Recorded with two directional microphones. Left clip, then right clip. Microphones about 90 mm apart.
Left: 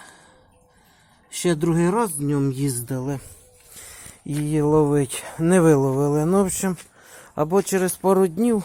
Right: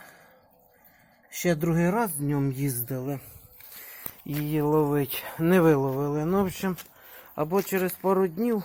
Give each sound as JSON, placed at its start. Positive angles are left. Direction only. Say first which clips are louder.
{"t": 1.3, "sound": "speech", "louder": "left 4 dB", "side_deg": 10}
{"t": 2.8, "sound": "speech", "louder": "left 4 dB", "side_deg": 35}
{"t": 4.4, "sound": "speech", "louder": "left 5 dB", "side_deg": 40}
{"t": 5.2, "sound": "speech", "louder": "left 3 dB", "side_deg": 35}
{"t": 5.8, "sound": "speech", "louder": "left 7 dB", "side_deg": 80}
{"t": 6.4, "sound": "speech", "louder": "left 5 dB", "side_deg": 50}
{"t": 7.8, "sound": "speech", "louder": "left 5 dB", "side_deg": 90}